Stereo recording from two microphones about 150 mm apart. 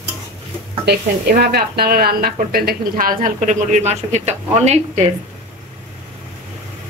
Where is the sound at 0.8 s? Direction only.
90° right; by 5.0 s 50° right (ahead or behind).